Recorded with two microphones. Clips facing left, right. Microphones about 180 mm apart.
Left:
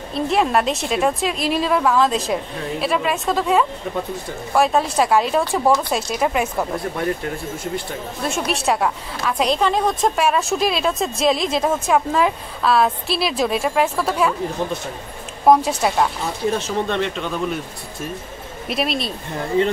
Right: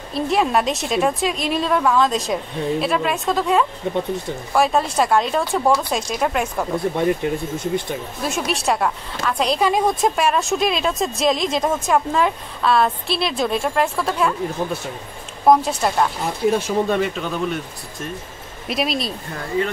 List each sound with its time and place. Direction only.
0.1 s a woman's voice: centre (ahead or behind)
3.9 s speech: 25° right (ahead or behind)
4.6 s a woman's voice: centre (ahead or behind)
7.0 s speech: 20° right (ahead or behind)
8.5 s a woman's voice: centre (ahead or behind)
9.6 s a woman's voice: 10° right (ahead or behind)
10.1 s a woman's voice: centre (ahead or behind)
16.4 s a woman's voice: 10° right (ahead or behind)
18.7 s a woman's voice: centre (ahead or behind)